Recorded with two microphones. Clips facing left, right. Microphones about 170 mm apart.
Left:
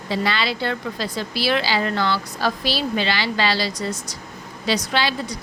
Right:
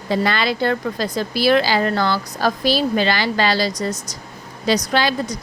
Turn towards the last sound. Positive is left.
turn(degrees=-45)  # may be behind; listen again after turning